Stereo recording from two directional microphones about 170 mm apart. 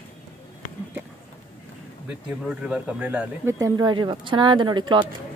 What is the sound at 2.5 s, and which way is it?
Speech, 5° right (ahead or behind).